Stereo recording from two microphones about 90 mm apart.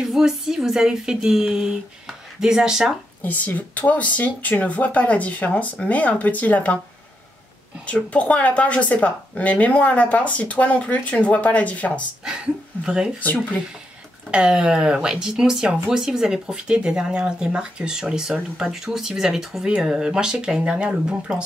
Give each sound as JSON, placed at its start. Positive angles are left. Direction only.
{"t": 0.0, "sound": "speech", "side_deg": -5}
{"t": 3.3, "sound": "speech", "side_deg": 20}
{"t": 7.8, "sound": "speech", "side_deg": 15}
{"t": 12.3, "sound": "speech", "side_deg": -10}
{"t": 13.2, "sound": "speech", "side_deg": 20}
{"t": 14.3, "sound": "speech", "side_deg": -10}